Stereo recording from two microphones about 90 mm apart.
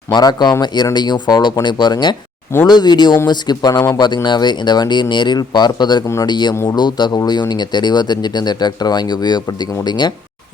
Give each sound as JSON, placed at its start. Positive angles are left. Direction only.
{"t": 0.1, "sound": "speech", "side_deg": 50}
{"t": 6.5, "sound": "speech", "side_deg": 40}
{"t": 6.7, "sound": "speech", "side_deg": 55}